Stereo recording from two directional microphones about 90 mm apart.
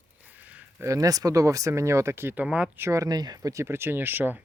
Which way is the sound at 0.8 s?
35° right (ahead or behind).